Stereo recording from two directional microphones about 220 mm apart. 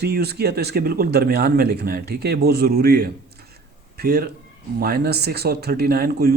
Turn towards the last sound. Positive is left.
turn(degrees=-45)  # may be behind; listen again after turning